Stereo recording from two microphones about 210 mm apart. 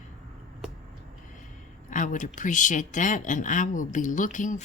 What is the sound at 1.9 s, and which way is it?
Speech, 40° left (ahead or behind).